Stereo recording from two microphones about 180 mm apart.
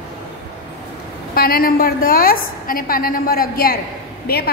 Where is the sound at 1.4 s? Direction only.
55° left (ahead or behind).